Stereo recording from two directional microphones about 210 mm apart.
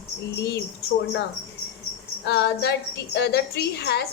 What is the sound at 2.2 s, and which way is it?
A woman's voice, 50° left (ahead or behind).